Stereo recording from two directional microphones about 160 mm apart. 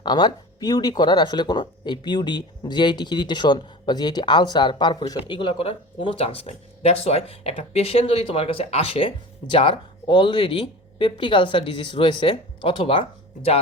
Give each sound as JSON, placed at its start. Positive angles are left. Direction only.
{"t": 0.0, "sound": "speech", "side_deg": 25}